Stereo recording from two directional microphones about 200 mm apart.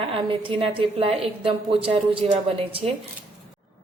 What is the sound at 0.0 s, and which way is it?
A woman's voice, 25° right (ahead or behind).